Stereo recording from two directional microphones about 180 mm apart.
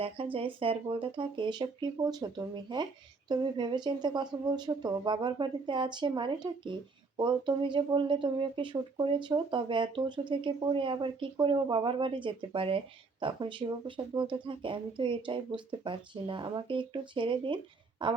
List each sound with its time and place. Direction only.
0.3 s speech: 30° right (ahead or behind)